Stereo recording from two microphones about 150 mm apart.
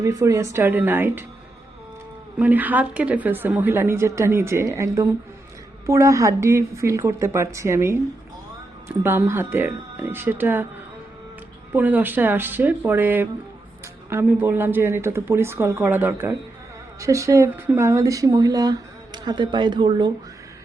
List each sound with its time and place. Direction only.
0.0 s a woman's voice: 20° right (ahead or behind)
2.4 s a woman's voice: 10° right (ahead or behind)
11.7 s a woman's voice: 10° right (ahead or behind); by 20.1 s 30° right (ahead or behind)